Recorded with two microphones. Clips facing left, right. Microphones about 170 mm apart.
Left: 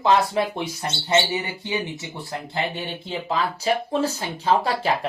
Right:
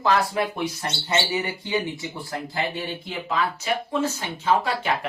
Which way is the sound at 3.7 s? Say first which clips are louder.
Left 3 dB; 35° left (ahead or behind).